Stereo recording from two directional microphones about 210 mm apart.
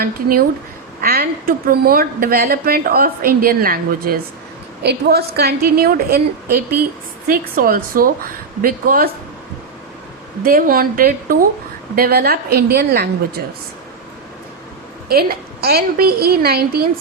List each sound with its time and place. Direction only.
0.0 s a woman's voice: 45° right (ahead or behind)
10.4 s a woman's voice: 45° right (ahead or behind)
15.1 s a woman's voice: 45° right (ahead or behind)